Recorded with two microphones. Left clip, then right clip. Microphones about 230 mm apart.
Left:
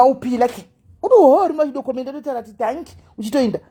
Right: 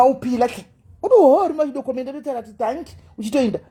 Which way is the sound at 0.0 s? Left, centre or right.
Centre.